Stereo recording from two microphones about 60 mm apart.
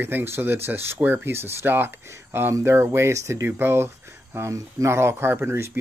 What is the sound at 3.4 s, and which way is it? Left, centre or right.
Speech, right.